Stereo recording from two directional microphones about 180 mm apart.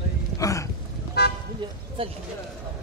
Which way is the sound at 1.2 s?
65° left (ahead or behind).